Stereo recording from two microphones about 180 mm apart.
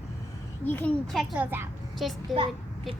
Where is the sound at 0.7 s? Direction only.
10° left (ahead or behind); by 1.6 s 10° right (ahead or behind).